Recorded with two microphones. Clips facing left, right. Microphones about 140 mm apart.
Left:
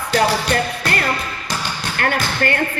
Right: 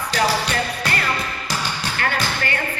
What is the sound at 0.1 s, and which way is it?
Music, 50° left (ahead or behind).